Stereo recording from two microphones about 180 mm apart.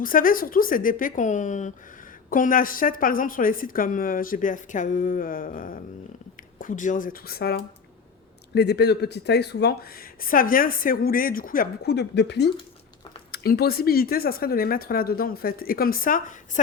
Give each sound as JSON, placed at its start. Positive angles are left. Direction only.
{"t": 0.0, "sound": "a woman's voice", "side_deg": 50}
{"t": 13.3, "sound": "speech", "side_deg": 60}